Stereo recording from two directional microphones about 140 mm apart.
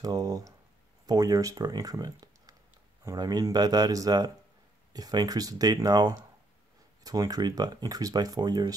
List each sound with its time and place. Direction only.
0.0 s speech: 25° right (ahead or behind)